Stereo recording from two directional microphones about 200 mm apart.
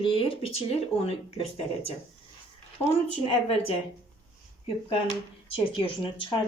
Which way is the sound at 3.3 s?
30° left (ahead or behind).